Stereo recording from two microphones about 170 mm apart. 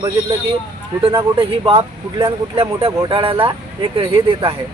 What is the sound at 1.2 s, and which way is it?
Speech, 30° right (ahead or behind).